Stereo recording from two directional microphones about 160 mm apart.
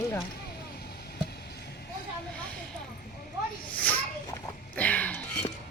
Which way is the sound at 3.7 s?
10° left (ahead or behind).